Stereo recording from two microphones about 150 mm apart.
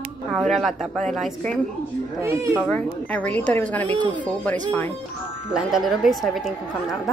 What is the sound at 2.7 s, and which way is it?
Speech, 10° left (ahead or behind).